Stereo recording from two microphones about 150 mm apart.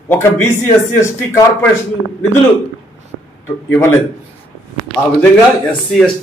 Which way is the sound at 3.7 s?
15° left (ahead or behind).